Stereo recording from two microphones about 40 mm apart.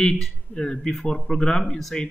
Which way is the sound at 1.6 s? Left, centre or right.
Centre.